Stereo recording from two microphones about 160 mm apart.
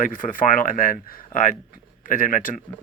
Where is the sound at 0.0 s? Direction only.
55° left (ahead or behind).